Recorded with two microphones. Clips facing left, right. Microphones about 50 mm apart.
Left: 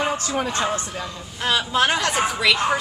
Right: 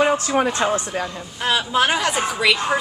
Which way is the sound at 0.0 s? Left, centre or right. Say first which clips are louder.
Right 6 dB; right.